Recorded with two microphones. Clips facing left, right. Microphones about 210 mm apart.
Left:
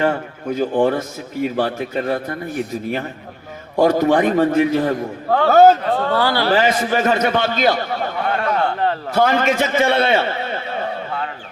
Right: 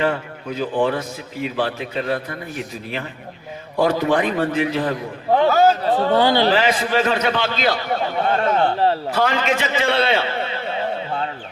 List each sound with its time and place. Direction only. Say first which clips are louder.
0.0 s a man's voice: left 2 dB; 50° left (ahead or behind)
6.1 s a man's voice: right 4 dB; 20° right (ahead or behind)
6.5 s a man's voice: left 2 dB; 50° left (ahead or behind)
8.4 s a man's voice: right 1 dB; 25° right (ahead or behind)
9.1 s a man's voice: left 4 dB; 50° left (ahead or behind)
10.4 s neigh: even; 50° left (ahead or behind)